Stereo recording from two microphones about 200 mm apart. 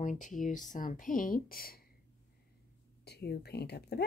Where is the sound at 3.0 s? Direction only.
55° left (ahead or behind).